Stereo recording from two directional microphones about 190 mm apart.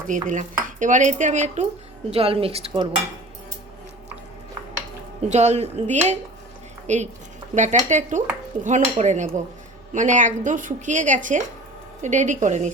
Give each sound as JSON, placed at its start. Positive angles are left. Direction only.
{"t": 0.1, "sound": "stir", "side_deg": -45}
{"t": 0.6, "sound": "dishes", "side_deg": -40}
{"t": 2.0, "sound": "a woman's voice", "side_deg": -30}
{"t": 5.3, "sound": "a woman's voice", "side_deg": -35}